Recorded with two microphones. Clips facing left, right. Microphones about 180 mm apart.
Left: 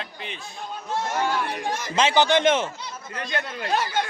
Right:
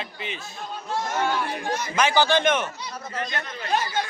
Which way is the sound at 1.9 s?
25° left (ahead or behind).